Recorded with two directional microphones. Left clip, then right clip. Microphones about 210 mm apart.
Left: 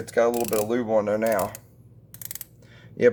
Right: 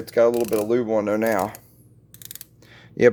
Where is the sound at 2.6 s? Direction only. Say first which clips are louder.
Right 3 dB; 50° right (ahead or behind).